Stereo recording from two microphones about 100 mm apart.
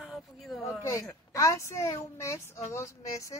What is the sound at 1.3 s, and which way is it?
A child's voice, 30° left (ahead or behind).